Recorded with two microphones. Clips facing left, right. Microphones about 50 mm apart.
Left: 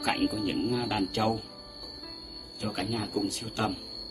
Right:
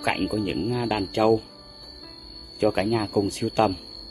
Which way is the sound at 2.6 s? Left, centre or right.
Right.